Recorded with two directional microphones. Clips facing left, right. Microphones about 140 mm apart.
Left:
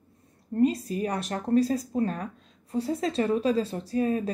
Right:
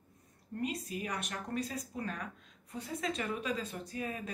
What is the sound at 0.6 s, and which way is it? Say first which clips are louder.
Speech: left 13 dB; 35° left (ahead or behind).